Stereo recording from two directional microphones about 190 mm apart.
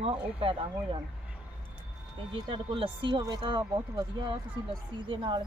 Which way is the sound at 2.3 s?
25° right (ahead or behind).